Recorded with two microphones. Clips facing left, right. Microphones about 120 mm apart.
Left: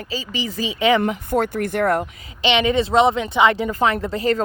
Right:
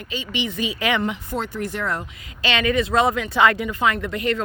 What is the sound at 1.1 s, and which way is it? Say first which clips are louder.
Speech: left 7 dB; 55° left (ahead or behind).